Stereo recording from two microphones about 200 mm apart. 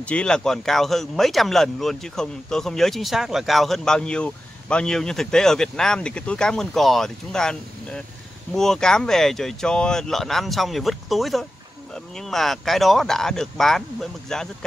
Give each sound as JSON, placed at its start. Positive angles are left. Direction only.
{"t": 0.0, "sound": "speech", "side_deg": 5}